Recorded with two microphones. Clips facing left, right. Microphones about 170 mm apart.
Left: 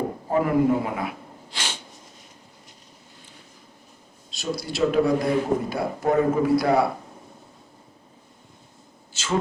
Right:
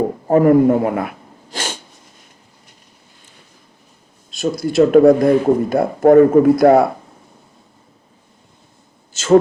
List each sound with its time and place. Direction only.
0.3 s speech: 50° right (ahead or behind)
4.3 s speech: 50° right (ahead or behind)
9.1 s a man's voice: 45° right (ahead or behind)